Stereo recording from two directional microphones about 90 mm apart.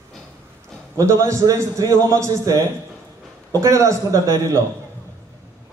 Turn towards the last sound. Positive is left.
turn(degrees=-35)  # may be behind; listen again after turning